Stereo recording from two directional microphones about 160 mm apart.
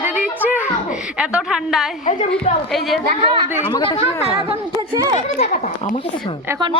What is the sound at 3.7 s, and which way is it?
Speech, 30° left (ahead or behind).